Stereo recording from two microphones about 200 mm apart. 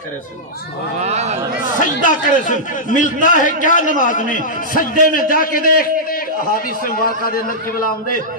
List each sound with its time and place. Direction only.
1.0 s a man's voice: 35° right (ahead or behind)
2.0 s a man's voice: 40° left (ahead or behind)